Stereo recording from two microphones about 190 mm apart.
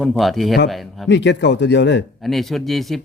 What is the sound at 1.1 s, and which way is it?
Speech, 70° left (ahead or behind).